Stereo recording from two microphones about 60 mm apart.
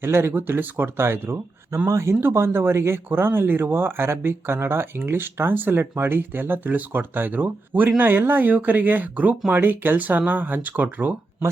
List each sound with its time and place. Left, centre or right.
0.0 s speech: right